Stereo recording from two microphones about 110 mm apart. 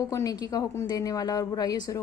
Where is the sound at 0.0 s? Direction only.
30° left (ahead or behind).